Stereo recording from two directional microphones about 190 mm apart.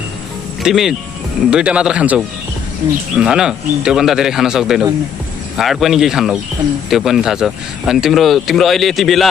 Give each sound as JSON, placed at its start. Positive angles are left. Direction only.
{"t": 0.6, "sound": "speech", "side_deg": 0}